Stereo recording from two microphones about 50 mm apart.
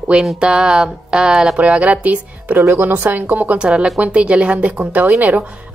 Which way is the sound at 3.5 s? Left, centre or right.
Right.